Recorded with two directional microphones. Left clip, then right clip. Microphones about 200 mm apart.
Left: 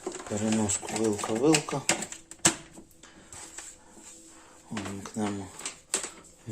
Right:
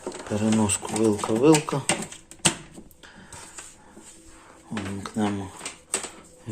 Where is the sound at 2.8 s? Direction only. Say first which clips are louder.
Right 4 dB; 5° left (ahead or behind).